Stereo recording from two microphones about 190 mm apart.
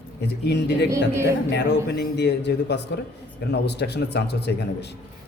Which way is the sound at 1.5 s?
65° left (ahead or behind).